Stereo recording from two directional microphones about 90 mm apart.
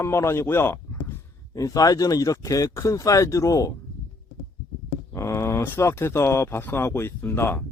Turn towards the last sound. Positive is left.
turn(degrees=25)  # may be behind; listen again after turning